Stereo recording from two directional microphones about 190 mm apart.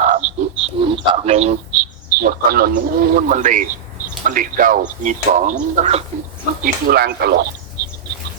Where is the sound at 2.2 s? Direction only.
50° right (ahead or behind).